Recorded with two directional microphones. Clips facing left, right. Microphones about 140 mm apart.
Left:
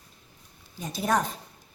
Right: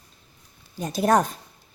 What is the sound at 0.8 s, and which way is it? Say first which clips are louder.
Speech: right 6 dB; 55° right (ahead or behind).